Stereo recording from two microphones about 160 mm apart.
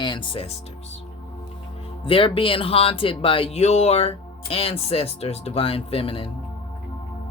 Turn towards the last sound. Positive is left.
turn(degrees=35)  # may be behind; listen again after turning